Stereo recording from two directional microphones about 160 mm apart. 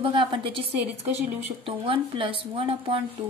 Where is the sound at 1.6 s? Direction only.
35° right (ahead or behind).